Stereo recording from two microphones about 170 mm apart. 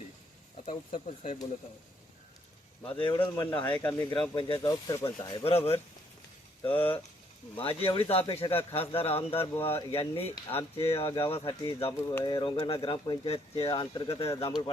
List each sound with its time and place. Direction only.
0.6 s speech: 35° left (ahead or behind)
2.8 s speech: 30° left (ahead or behind)
3.2 s speech: 10° left (ahead or behind)
4.4 s speech: 30° left (ahead or behind)
4.7 s speech: 20° left (ahead or behind)
5.0 s speech: 35° left (ahead or behind)
6.7 s speech: 30° left (ahead or behind)